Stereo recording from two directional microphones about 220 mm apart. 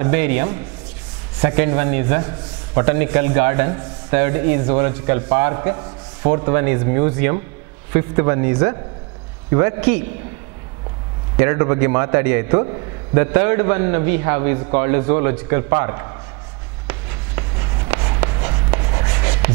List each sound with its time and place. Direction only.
0.0 s a man's voice: 10° right (ahead or behind)
11.3 s a man's voice: 15° right (ahead or behind)
17.4 s writing: 20° right (ahead or behind)